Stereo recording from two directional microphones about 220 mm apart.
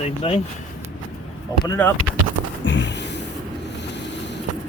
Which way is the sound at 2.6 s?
55° left (ahead or behind).